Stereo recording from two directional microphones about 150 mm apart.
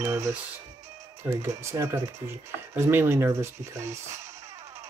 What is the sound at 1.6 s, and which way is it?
Speech, 20° right (ahead or behind).